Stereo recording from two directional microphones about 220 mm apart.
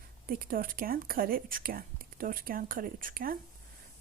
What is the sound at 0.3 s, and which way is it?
Speech, 40° right (ahead or behind).